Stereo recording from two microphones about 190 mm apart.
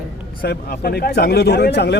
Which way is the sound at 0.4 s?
55° left (ahead or behind).